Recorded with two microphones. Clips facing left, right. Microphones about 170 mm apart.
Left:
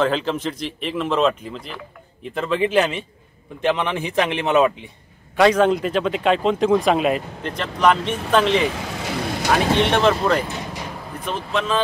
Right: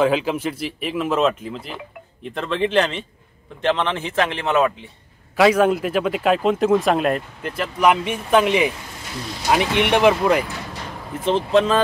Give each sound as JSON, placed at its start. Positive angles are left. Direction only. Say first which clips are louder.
{"t": 0.0, "sound": "speech", "louder": "right 2 dB", "side_deg": -10}
{"t": 5.4, "sound": "speech", "louder": "even", "side_deg": -5}
{"t": 8.7, "sound": "vehicle", "louder": "left 7 dB", "side_deg": 90}
{"t": 9.8, "sound": "speech", "louder": "right 1 dB", "side_deg": -15}
{"t": 11.2, "sound": "speech", "louder": "right 7 dB", "side_deg": -35}